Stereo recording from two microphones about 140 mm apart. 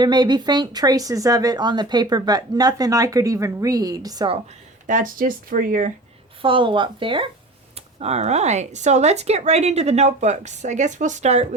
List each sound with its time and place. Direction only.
0.0 s speech: 30° right (ahead or behind)
4.9 s speech: 75° right (ahead or behind)
6.4 s speech: 35° right (ahead or behind); by 11.4 s 55° right (ahead or behind)